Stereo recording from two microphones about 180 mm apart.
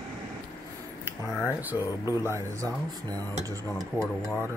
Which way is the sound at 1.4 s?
10° right (ahead or behind).